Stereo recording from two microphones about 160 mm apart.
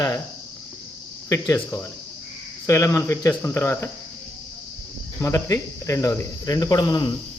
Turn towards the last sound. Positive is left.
turn(degrees=25)  # may be behind; listen again after turning